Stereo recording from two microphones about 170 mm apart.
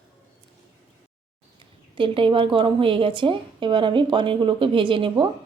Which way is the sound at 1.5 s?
30° right (ahead or behind).